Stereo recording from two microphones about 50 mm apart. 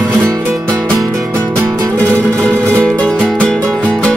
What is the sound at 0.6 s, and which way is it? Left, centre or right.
Music, left.